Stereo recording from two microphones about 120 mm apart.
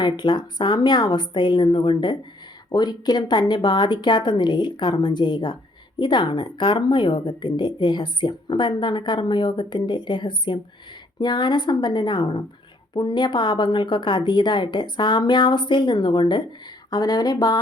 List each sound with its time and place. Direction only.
0.0 s speech: 40° left (ahead or behind)